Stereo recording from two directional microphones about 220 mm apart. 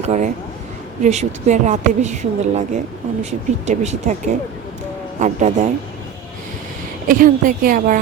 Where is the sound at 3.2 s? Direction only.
30° right (ahead or behind).